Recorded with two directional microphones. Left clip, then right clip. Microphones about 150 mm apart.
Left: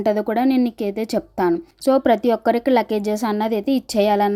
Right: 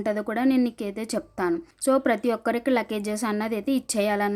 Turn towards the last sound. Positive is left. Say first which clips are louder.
# left 7 dB
turn(degrees=25)  # may be behind; listen again after turning